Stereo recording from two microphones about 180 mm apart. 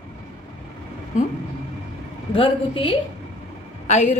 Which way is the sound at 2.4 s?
30° left (ahead or behind).